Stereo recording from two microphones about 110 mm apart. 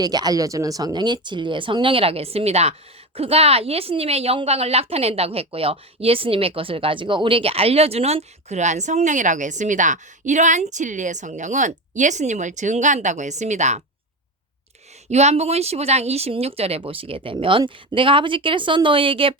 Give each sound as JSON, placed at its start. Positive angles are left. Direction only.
{"t": 0.0, "sound": "a woman's voice", "side_deg": -35}
{"t": 15.1, "sound": "speech", "side_deg": -80}